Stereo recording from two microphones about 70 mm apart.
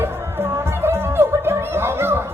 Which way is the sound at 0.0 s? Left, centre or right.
Right.